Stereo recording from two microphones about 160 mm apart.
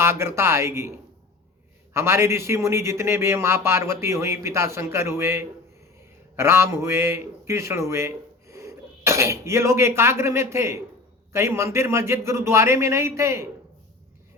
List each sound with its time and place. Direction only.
0.0 s a man's voice: 15° right (ahead or behind)